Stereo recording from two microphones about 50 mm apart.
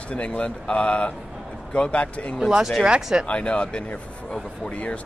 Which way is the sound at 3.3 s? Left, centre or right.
Left.